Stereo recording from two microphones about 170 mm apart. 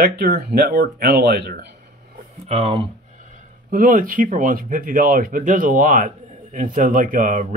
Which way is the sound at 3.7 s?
55° right (ahead or behind).